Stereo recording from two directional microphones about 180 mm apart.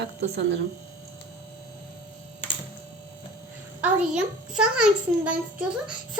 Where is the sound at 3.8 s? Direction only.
5° right (ahead or behind).